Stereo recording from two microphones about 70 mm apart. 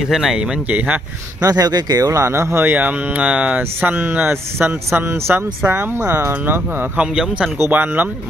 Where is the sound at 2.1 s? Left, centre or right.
Right.